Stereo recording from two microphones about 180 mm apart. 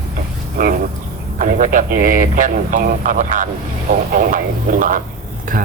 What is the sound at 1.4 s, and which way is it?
Speech, 50° right (ahead or behind).